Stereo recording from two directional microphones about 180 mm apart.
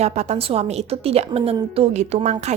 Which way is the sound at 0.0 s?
40° right (ahead or behind).